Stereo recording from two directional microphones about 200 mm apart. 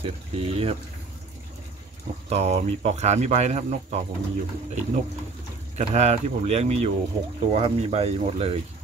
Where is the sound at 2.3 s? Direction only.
30° right (ahead or behind).